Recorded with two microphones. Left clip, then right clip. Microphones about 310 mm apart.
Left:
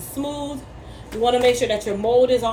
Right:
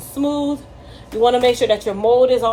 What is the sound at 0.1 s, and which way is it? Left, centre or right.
A woman's voice, right.